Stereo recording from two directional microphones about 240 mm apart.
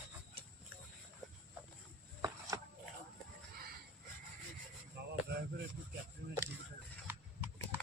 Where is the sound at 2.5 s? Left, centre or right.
Centre.